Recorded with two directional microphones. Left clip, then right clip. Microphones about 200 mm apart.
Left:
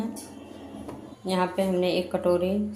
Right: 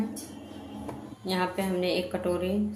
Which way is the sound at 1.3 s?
10° left (ahead or behind).